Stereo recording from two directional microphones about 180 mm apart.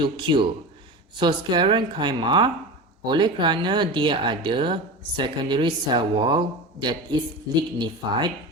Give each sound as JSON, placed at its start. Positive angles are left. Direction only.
{"t": 0.0, "sound": "speech", "side_deg": -25}